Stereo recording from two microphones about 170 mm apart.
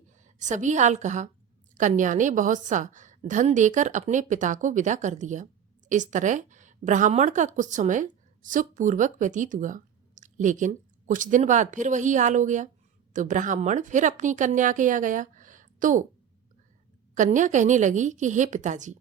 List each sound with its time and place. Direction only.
0.3 s a woman's voice: 45° right (ahead or behind)
17.2 s a woman's voice: 45° right (ahead or behind)